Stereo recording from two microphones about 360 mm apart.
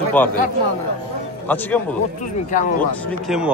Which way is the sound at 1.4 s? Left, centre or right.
Centre.